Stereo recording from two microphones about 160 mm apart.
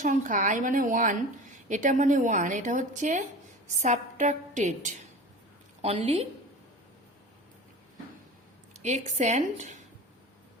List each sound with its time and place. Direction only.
0.0 s a woman's voice: 55° right (ahead or behind)
8.8 s a woman's voice: 45° right (ahead or behind)